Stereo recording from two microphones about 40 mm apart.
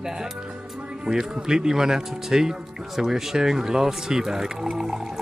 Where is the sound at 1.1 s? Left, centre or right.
Centre.